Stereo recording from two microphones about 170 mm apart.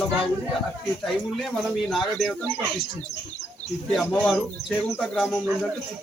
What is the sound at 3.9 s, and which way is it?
Speech, 5° left (ahead or behind).